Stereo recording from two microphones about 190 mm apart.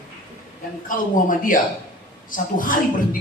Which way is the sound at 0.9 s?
45° left (ahead or behind).